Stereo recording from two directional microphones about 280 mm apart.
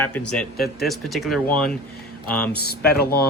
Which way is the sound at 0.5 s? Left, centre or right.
Left.